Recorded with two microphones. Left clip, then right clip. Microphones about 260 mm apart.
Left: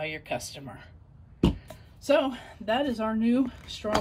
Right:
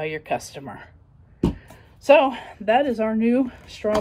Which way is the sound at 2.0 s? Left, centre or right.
Right.